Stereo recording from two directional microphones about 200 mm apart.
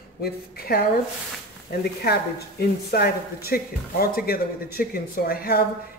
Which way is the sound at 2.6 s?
50° left (ahead or behind).